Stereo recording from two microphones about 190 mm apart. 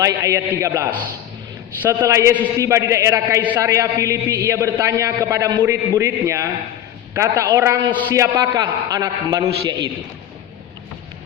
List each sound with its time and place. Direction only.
0.0 s a man's voice: 15° right (ahead or behind)